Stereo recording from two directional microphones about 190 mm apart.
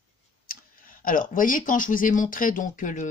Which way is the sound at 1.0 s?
45° left (ahead or behind).